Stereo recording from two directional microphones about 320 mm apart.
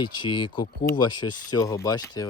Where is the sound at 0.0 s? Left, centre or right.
Centre.